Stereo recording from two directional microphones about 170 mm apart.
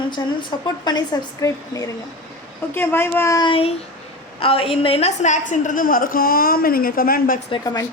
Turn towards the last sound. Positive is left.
turn(degrees=20)  # may be behind; listen again after turning